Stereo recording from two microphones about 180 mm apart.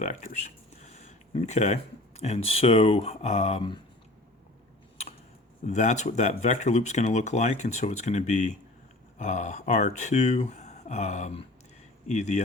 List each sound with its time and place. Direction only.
0.0 s speech: 40° left (ahead or behind)
5.0 s a sound: 35° left (ahead or behind)
5.6 s speech: 40° left (ahead or behind)